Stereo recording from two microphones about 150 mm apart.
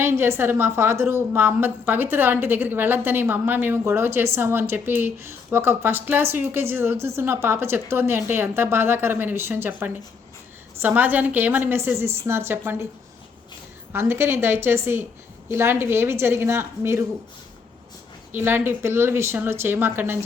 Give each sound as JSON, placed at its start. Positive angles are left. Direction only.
{"t": 0.0, "sound": "a woman's voice", "side_deg": -15}
{"t": 13.9, "sound": "a woman's voice", "side_deg": -15}
{"t": 18.3, "sound": "a woman's voice", "side_deg": -15}